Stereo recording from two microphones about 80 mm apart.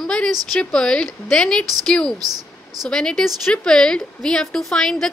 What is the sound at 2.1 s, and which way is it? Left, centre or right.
Speech, right.